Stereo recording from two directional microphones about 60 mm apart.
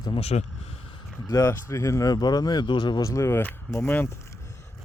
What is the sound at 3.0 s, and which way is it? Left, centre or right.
Speech, left.